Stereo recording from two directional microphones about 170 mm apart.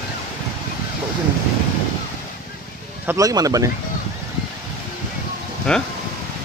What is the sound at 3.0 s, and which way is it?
Speech, 20° right (ahead or behind).